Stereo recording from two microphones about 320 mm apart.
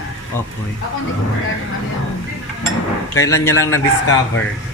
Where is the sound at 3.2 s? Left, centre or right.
Centre.